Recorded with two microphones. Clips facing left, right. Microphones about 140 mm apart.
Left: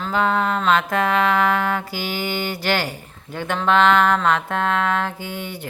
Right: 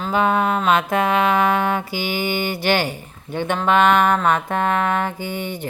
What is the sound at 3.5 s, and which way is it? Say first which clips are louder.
Music: even; 15° right (ahead or behind).